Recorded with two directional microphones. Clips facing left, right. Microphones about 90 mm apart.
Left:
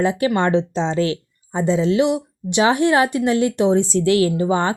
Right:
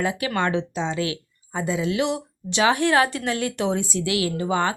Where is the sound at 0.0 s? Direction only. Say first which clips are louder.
Left 6 dB; 25° left (ahead or behind).